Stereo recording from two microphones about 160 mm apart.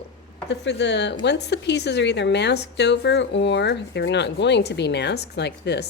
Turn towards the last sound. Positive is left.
turn(degrees=90)